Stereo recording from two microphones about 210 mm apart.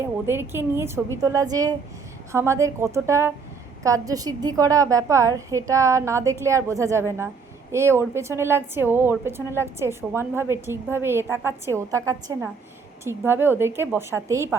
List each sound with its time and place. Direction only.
0.0 s a woman's voice: 10° right (ahead or behind)